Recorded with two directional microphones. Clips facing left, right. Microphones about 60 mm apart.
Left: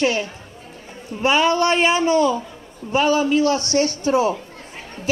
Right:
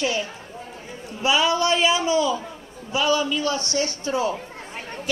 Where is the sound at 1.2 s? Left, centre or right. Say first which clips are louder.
Left 3 dB; left.